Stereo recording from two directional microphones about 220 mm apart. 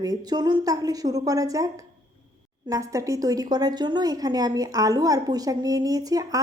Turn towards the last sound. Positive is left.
turn(degrees=-15)  # may be behind; listen again after turning